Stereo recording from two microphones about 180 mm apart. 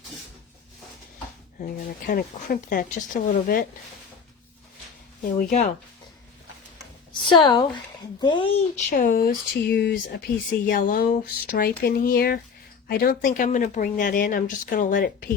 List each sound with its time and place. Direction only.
1.6 s speech: 50° left (ahead or behind)
5.2 s speech: 55° left (ahead or behind)
7.1 s speech: 25° left (ahead or behind)
8.9 s speech: 50° left (ahead or behind)
10.3 s speech: 50° left (ahead or behind)